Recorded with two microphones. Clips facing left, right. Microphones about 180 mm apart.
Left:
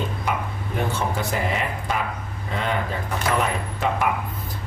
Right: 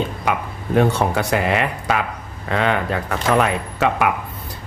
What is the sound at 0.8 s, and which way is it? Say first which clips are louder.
A man's voice: right 8 dB; 75° right (ahead or behind).